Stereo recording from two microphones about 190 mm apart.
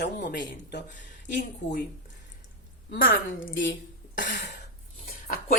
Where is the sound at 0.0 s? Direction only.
65° left (ahead or behind).